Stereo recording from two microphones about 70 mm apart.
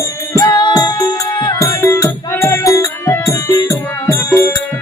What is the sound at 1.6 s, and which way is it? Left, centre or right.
Music, left.